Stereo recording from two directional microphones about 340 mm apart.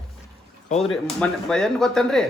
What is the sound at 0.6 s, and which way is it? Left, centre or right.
Speech, centre.